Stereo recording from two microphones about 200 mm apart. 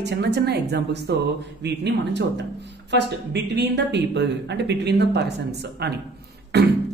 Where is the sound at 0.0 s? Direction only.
60° right (ahead or behind).